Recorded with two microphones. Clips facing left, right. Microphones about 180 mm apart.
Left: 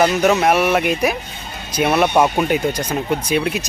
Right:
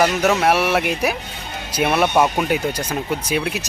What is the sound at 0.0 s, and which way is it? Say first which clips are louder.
Speech: left 2 dB; centre (ahead or behind).